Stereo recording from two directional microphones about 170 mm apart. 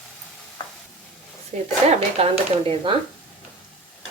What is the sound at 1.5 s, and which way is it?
Speech, 40° right (ahead or behind).